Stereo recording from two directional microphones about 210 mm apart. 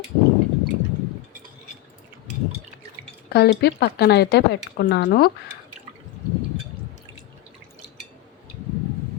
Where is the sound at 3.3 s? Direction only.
50° left (ahead or behind).